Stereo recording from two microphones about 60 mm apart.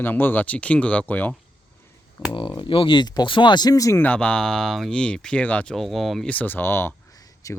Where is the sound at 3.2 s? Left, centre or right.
Left.